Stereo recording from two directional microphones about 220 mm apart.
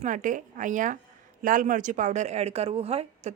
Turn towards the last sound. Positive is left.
turn(degrees=-30)  # may be behind; listen again after turning